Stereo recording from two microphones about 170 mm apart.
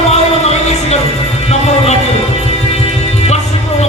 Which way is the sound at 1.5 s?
40° left (ahead or behind).